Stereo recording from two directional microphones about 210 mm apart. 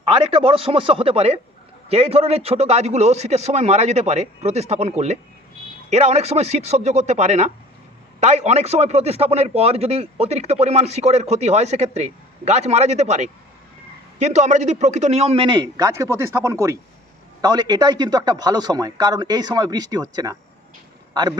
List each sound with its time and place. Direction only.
0.0 s a man's voice: 25° right (ahead or behind)